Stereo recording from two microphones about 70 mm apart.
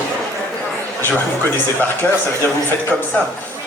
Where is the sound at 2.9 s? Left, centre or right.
Left.